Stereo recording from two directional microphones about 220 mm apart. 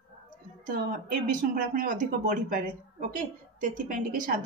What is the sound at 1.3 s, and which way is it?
A woman's voice, 40° right (ahead or behind).